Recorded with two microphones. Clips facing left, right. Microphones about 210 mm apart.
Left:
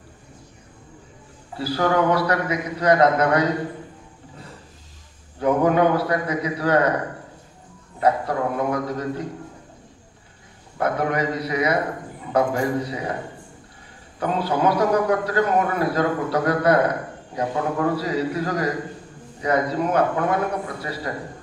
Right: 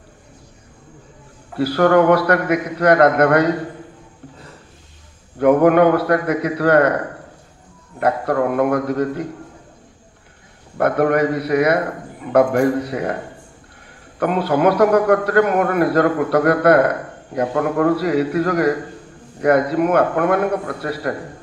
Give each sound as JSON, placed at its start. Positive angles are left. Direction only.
{"t": 1.5, "sound": "a man's voice", "side_deg": -60}
{"t": 5.4, "sound": "a man's voice", "side_deg": -65}
{"t": 8.0, "sound": "a man's voice", "side_deg": -60}
{"t": 10.8, "sound": "a man's voice", "side_deg": -60}
{"t": 14.2, "sound": "a man's voice", "side_deg": -65}